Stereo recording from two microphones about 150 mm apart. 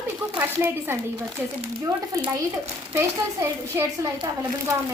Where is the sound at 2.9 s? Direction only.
15° right (ahead or behind).